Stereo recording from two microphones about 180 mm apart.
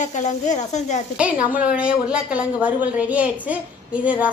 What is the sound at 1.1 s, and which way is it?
A woman's voice, 10° right (ahead or behind).